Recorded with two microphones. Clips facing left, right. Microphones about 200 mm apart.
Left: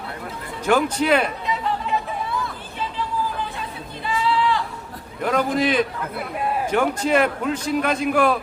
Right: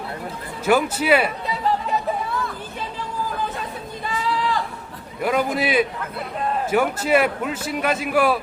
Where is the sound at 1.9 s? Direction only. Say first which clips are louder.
Even; 40° right (ahead or behind).